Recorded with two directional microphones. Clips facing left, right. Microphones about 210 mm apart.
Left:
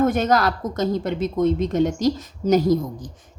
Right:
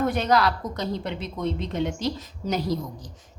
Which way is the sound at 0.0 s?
45° left (ahead or behind).